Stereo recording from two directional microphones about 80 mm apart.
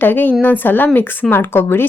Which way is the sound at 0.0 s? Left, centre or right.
Left.